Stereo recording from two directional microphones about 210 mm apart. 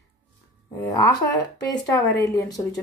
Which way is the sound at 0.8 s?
15° left (ahead or behind).